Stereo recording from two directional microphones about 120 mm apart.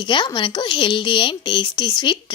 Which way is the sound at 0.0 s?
40° left (ahead or behind).